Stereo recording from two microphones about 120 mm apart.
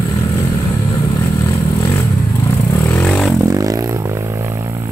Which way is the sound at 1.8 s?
30° left (ahead or behind).